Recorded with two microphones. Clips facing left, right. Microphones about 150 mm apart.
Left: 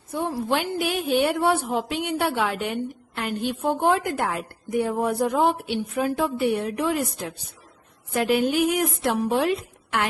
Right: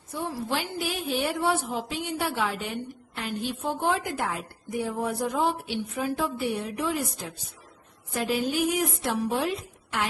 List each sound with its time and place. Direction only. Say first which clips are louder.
0.1 s a woman's voice: left 5 dB; 55° left (ahead or behind)
8.1 s a woman's voice: left 6 dB; 65° left (ahead or behind)